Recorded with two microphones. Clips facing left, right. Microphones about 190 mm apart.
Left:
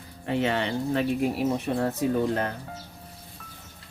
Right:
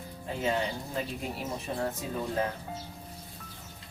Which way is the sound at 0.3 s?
75° left (ahead or behind).